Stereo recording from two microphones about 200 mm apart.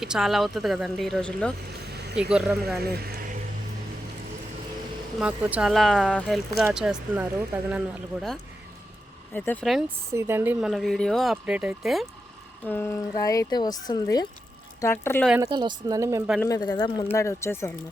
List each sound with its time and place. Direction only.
0.0 s speech: centre (ahead or behind)
1.9 s vehicle: 55° right (ahead or behind)
2.3 s speech: 5° right (ahead or behind)
2.8 s speech: 50° right (ahead or behind)
5.2 s speech: 5° right (ahead or behind)
9.3 s speech: 10° left (ahead or behind)
10.1 s speech: 15° right (ahead or behind)
12.6 s speech: 10° left (ahead or behind)
15.4 s speech: 20° right (ahead or behind)
16.4 s speech: 20° left (ahead or behind)